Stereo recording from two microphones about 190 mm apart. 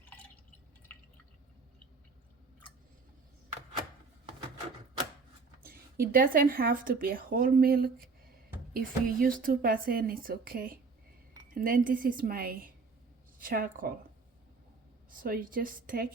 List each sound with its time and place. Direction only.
5.6 s a woman's voice: 50° right (ahead or behind)
15.1 s a woman's voice: 50° right (ahead or behind)